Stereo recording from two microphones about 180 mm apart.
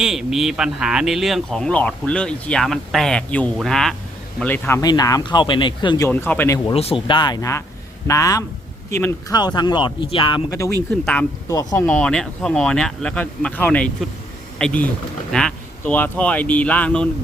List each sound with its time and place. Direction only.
0.0 s speech: 5° right (ahead or behind); by 6.1 s 25° left (ahead or behind)
6.1 s speech: 10° left (ahead or behind)
6.7 s speech: 30° left (ahead or behind); by 9.1 s 10° left (ahead or behind)
9.3 s speech: 25° left (ahead or behind)
11.0 s speech: 5° left (ahead or behind)
11.4 s speech: 20° left (ahead or behind)
11.9 s speech: 5° left (ahead or behind)